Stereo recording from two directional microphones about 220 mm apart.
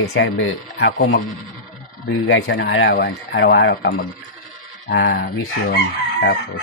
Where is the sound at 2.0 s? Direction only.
55° left (ahead or behind).